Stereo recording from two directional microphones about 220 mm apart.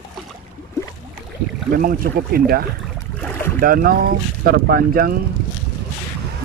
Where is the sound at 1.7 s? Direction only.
40° right (ahead or behind).